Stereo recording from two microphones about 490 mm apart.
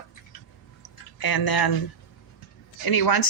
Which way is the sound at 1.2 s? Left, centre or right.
Left.